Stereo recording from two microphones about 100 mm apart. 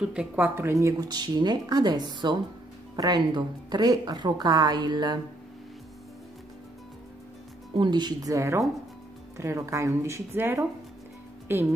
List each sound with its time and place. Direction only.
0.0 s speech: 10° right (ahead or behind)
0.6 s a woman's voice: 30° right (ahead or behind); by 5.2 s 45° right (ahead or behind)
7.7 s speech: 50° right (ahead or behind); by 11.7 s 20° right (ahead or behind)